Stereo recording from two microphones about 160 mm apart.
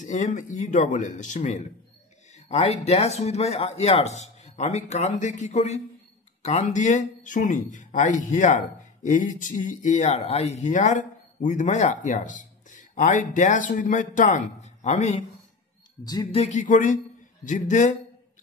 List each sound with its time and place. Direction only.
0.0 s speech: 50° left (ahead or behind)
16.0 s speech: 25° left (ahead or behind)
16.3 s speech: 45° left (ahead or behind)